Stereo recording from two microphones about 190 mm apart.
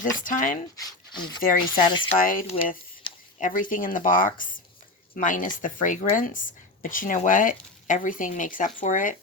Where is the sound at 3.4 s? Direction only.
45° left (ahead or behind).